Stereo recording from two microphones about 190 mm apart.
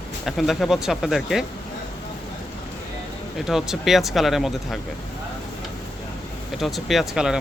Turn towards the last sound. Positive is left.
turn(degrees=-5)  # may be behind; listen again after turning